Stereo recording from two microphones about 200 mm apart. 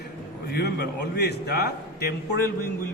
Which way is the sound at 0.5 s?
55° left (ahead or behind).